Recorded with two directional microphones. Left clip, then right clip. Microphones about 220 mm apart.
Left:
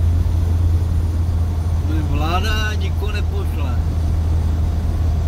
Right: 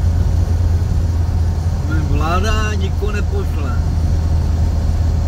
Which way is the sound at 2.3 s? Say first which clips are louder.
Right 3 dB; 25° right (ahead or behind).